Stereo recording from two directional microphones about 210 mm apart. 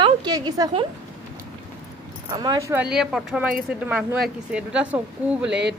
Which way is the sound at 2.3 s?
20° right (ahead or behind).